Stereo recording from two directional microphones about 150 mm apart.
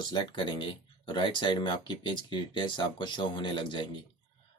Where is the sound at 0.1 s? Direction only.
35° left (ahead or behind).